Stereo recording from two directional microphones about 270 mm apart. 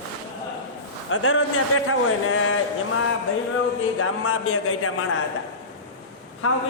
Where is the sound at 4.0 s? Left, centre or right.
Left.